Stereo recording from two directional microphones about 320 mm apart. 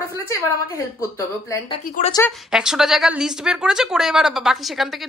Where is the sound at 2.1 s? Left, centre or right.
Centre.